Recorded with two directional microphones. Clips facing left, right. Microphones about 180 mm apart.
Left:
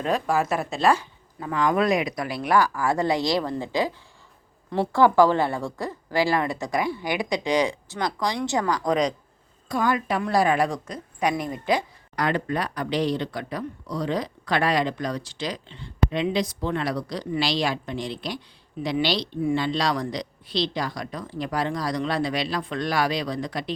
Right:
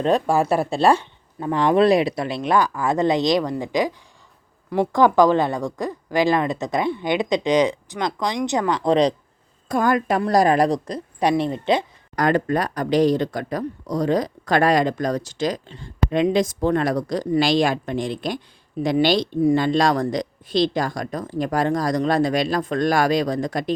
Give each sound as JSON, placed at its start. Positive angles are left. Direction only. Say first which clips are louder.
{"t": 0.0, "sound": "a woman's voice", "louder": "right 5 dB", "side_deg": -30}
{"t": 9.6, "sound": "a woman's voice", "louder": "right 4 dB", "side_deg": -50}
{"t": 12.1, "sound": "speech", "louder": "right 6 dB", "side_deg": -45}